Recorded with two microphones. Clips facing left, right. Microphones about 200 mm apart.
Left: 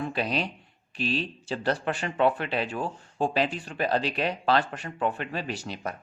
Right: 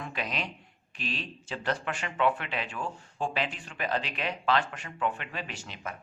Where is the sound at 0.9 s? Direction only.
30° left (ahead or behind).